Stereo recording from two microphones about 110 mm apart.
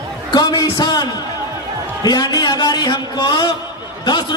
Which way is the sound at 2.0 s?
40° left (ahead or behind).